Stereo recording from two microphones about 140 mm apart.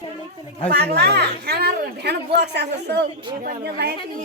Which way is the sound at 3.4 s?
90° right.